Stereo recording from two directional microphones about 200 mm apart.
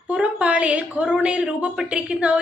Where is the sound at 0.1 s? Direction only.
5° right (ahead or behind).